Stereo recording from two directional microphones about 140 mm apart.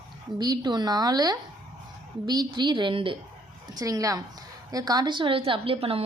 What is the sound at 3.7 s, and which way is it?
A woman's voice, 25° right (ahead or behind).